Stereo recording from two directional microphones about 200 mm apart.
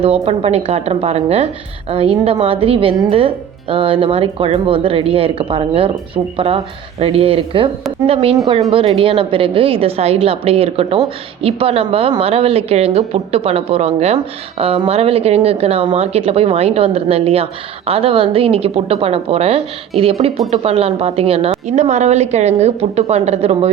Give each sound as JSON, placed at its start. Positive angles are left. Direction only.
{"t": 0.0, "sound": "a woman's voice", "side_deg": -30}